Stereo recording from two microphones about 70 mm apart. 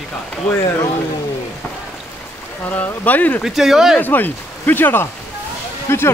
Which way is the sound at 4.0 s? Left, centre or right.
Left.